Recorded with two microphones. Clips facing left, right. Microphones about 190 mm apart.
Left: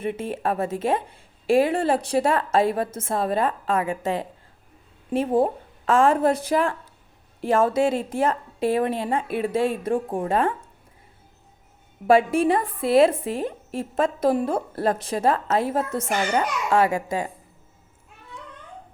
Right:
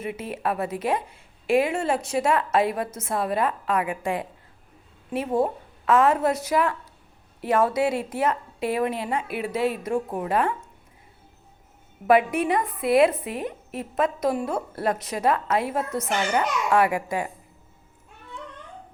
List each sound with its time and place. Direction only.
0.2 s a woman's voice: 30° left (ahead or behind)
12.0 s a woman's voice: 30° left (ahead or behind)